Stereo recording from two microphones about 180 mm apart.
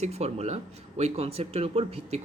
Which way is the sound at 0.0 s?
35° right (ahead or behind).